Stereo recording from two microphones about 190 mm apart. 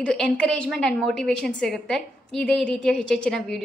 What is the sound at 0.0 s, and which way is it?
A woman's voice, 5° left (ahead or behind).